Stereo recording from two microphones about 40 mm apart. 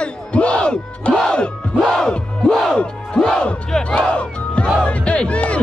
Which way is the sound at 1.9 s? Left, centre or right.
Centre.